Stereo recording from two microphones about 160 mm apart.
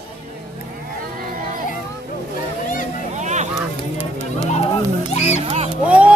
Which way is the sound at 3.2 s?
45° right (ahead or behind).